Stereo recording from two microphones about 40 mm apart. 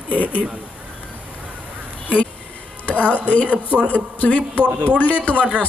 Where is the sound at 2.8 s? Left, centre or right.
Left.